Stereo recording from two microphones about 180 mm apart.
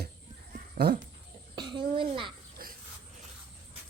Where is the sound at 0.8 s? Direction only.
60° right (ahead or behind).